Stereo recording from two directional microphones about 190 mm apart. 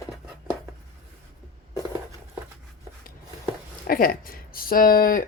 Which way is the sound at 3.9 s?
50° left (ahead or behind).